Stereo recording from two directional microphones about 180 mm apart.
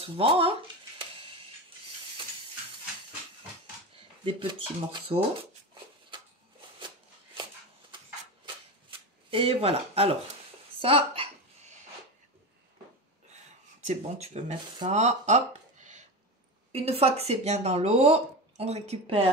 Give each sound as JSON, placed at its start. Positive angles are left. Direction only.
{"t": 0.0, "sound": "a sound", "side_deg": -30}
{"t": 4.2, "sound": "speech", "side_deg": -30}
{"t": 9.3, "sound": "speech", "side_deg": -30}
{"t": 10.8, "sound": "a sound", "side_deg": -30}
{"t": 13.8, "sound": "speech", "side_deg": -35}
{"t": 16.7, "sound": "speech", "side_deg": -35}